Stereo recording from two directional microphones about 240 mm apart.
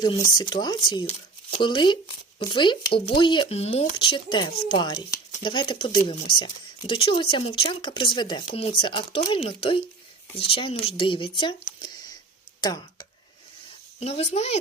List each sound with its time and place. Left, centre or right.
0.0 s speech: centre